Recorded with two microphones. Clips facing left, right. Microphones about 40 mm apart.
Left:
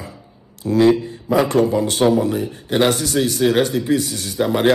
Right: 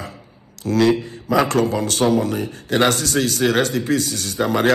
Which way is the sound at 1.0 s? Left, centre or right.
Right.